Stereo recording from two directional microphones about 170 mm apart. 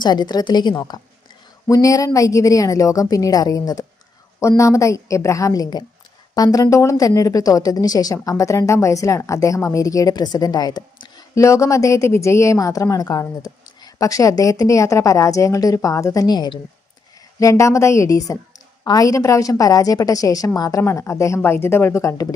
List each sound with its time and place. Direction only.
0.0 s a woman's voice: 25° left (ahead or behind)